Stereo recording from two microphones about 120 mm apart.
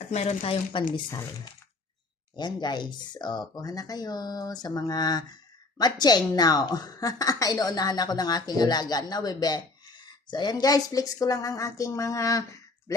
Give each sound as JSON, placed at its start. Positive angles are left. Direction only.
{"t": 0.1, "sound": "speech", "side_deg": 60}
{"t": 2.3, "sound": "a woman's voice", "side_deg": 40}